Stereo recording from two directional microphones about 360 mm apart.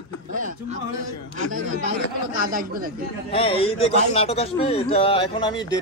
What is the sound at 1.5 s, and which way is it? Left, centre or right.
Speech, centre.